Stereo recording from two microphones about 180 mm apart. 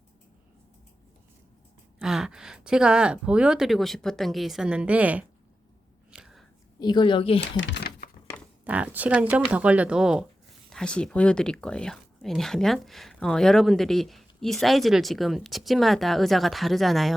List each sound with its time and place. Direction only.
2.0 s speech: 5° right (ahead or behind)
6.1 s a sound: 5° right (ahead or behind)
6.7 s a woman's voice: 25° left (ahead or behind)
7.4 s speech: 80° left; by 8.1 s 60° left (ahead or behind)
8.6 s speech: 10° right (ahead or behind)